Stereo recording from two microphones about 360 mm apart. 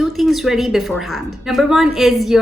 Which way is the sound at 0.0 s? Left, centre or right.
Centre.